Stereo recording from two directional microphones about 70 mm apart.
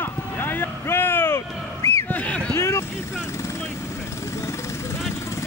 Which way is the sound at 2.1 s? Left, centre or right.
Centre.